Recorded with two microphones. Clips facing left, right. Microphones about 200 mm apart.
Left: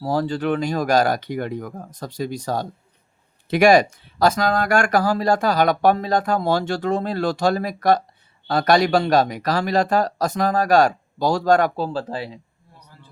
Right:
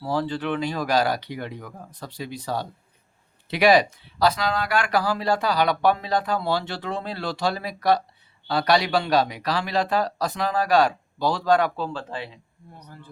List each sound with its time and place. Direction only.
0.0 s speech: 45° left (ahead or behind)